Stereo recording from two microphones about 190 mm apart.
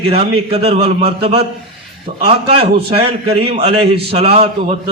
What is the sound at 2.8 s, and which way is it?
A man's voice, 30° right (ahead or behind).